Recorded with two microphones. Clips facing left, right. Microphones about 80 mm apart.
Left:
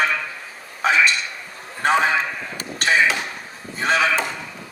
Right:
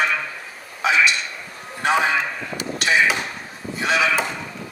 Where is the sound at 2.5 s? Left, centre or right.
Left.